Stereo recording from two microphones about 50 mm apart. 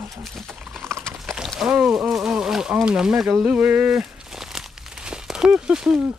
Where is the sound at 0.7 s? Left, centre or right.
Right.